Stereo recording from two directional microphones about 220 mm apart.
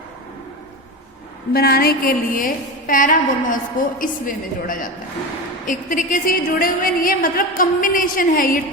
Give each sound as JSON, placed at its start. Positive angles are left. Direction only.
{"t": 1.5, "sound": "a woman's voice", "side_deg": 45}